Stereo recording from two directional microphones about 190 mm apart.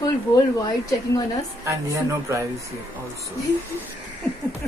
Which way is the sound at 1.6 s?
15° right (ahead or behind).